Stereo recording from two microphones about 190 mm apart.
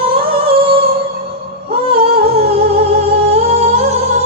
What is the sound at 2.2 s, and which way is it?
Humming, 30° right (ahead or behind).